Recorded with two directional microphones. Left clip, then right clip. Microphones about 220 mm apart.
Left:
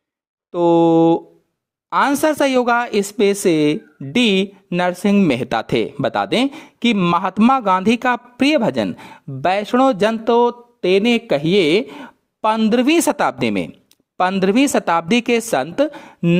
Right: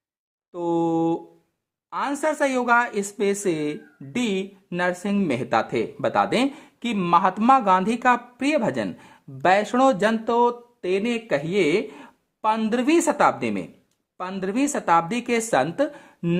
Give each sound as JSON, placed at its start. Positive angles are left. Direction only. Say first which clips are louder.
{"t": 0.5, "sound": "speech", "louder": "left 10 dB", "side_deg": 30}
{"t": 5.3, "sound": "speech", "louder": "left 4 dB", "side_deg": 40}
{"t": 12.7, "sound": "speech", "louder": "left 5 dB", "side_deg": 40}